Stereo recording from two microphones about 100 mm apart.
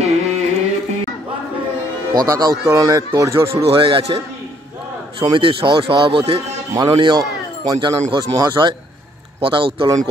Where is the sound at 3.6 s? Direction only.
65° right (ahead or behind).